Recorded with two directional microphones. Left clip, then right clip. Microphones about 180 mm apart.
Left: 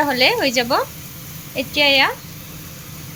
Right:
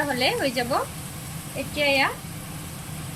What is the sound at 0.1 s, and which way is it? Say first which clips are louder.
A woman's voice: left 7 dB; 40° left (ahead or behind).